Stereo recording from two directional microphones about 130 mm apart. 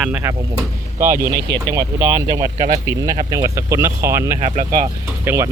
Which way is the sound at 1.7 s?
30° right (ahead or behind).